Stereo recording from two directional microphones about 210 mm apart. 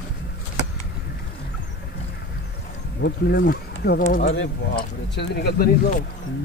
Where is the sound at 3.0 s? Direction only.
50° left (ahead or behind).